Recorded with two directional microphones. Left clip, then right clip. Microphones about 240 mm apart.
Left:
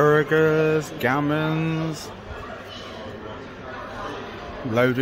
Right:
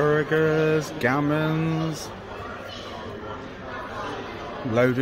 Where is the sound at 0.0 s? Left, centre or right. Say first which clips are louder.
Left 3 dB; centre.